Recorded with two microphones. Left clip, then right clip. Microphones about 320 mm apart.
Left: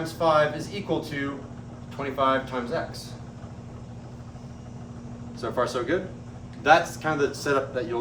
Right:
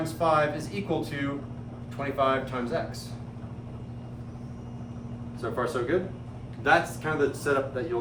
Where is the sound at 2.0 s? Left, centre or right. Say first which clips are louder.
Left 2 dB; centre.